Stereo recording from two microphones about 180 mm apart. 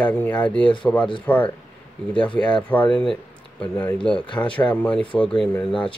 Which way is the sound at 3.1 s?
10° left (ahead or behind).